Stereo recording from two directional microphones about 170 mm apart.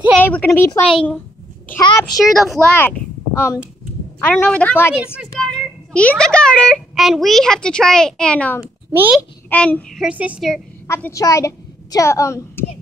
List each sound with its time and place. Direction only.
0.2 s a woman's voice: 10° left (ahead or behind)
1.8 s a child's voice: 25° left (ahead or behind)
2.2 s a child's voice: centre (ahead or behind)
2.7 s a woman's voice: 10° left (ahead or behind)
4.9 s a child's voice: 5° right (ahead or behind)
8.9 s a child's voice: 10° right (ahead or behind)
9.5 s a child's voice: 10° left (ahead or behind); by 10.5 s 5° right (ahead or behind)
10.9 s a woman's voice: 15° left (ahead or behind)